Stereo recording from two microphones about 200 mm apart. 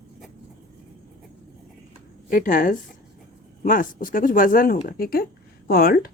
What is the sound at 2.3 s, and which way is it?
Speech, 45° left (ahead or behind).